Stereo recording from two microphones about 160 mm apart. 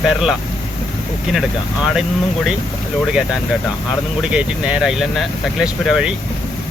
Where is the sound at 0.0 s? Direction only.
5° right (ahead or behind).